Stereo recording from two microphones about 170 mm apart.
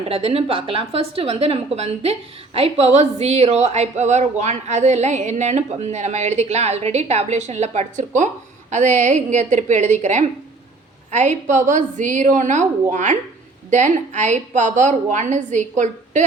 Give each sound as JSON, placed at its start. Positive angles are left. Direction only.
{"t": 0.1, "sound": "a woman's voice", "side_deg": -35}